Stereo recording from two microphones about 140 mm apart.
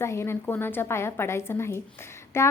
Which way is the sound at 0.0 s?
20° left (ahead or behind).